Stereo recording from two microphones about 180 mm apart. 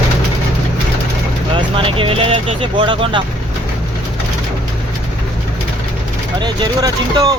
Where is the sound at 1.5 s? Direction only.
30° right (ahead or behind).